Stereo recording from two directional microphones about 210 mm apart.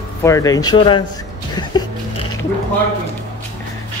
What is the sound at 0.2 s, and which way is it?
Speech, 15° left (ahead or behind).